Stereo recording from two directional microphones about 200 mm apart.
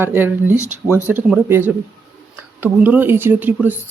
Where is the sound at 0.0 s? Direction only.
10° right (ahead or behind).